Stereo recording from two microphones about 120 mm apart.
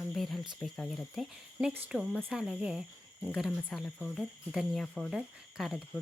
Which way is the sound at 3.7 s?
5° left (ahead or behind).